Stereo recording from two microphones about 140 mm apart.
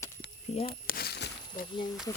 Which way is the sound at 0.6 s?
90° left.